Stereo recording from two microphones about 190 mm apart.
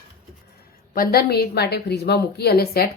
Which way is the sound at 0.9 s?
50° left (ahead or behind).